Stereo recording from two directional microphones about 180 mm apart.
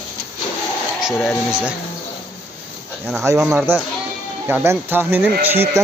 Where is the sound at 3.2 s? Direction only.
15° right (ahead or behind).